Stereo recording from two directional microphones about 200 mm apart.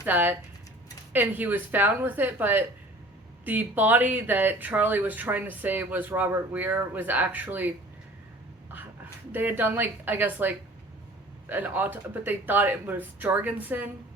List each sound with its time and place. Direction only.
0.0 s speech: 10° right (ahead or behind)
9.3 s speech: 10° right (ahead or behind)